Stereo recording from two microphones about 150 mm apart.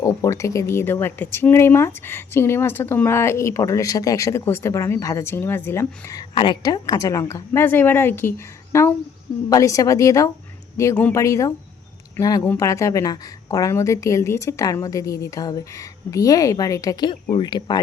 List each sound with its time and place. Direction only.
0.0 s a woman's voice: 20° left (ahead or behind)